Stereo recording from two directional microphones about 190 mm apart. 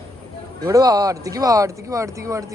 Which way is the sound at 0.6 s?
20° right (ahead or behind).